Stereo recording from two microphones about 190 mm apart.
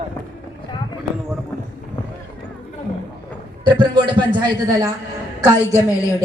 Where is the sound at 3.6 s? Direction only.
25° right (ahead or behind).